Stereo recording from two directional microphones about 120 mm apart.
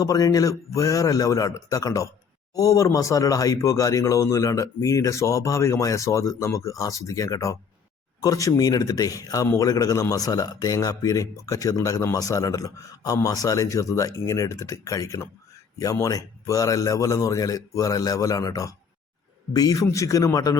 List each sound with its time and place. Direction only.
0.0 s speech: 30° left (ahead or behind)